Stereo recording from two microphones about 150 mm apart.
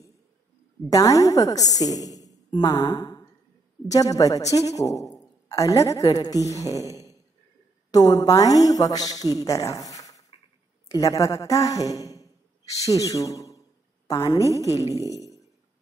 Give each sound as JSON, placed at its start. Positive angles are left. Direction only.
{"t": 0.8, "sound": "a woman's voice", "side_deg": 25}
{"t": 6.6, "sound": "speech", "side_deg": -20}
{"t": 7.9, "sound": "a woman's voice", "side_deg": 25}
{"t": 14.7, "sound": "speech", "side_deg": -20}